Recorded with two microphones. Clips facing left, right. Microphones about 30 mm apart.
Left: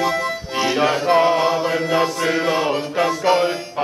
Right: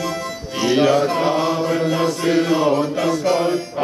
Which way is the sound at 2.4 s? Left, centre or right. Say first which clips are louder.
Right 3 dB; left.